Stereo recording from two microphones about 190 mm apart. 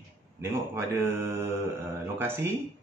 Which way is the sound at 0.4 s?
10° right (ahead or behind).